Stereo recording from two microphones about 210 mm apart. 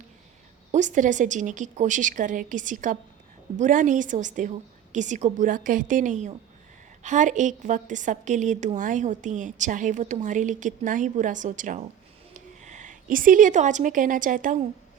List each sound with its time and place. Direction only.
0.7 s a woman's voice: 35° right (ahead or behind)